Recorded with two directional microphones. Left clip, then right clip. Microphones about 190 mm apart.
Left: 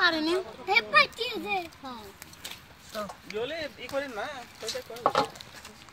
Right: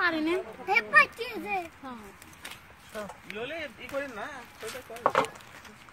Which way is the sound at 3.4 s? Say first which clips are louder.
Left 3 dB; 25° left (ahead or behind).